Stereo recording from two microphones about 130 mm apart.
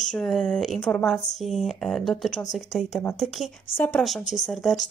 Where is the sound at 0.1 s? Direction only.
5° left (ahead or behind).